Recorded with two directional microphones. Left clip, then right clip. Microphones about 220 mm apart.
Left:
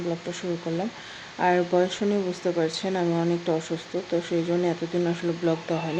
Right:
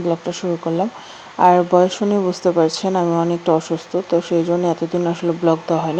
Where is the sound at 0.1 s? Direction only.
20° right (ahead or behind).